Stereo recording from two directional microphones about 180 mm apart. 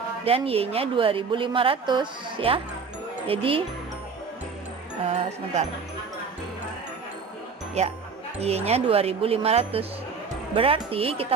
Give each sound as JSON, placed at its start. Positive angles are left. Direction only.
{"t": 0.3, "sound": "a woman's voice", "side_deg": -30}
{"t": 7.8, "sound": "a woman's voice", "side_deg": -35}